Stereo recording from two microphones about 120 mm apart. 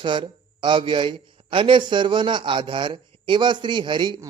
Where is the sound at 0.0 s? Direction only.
40° right (ahead or behind).